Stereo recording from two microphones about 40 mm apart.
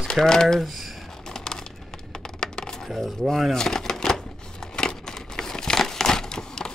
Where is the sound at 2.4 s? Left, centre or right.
Centre.